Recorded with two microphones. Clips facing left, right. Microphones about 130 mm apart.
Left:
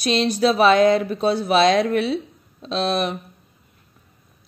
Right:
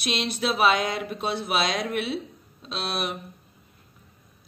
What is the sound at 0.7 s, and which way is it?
A woman's voice, 40° left (ahead or behind).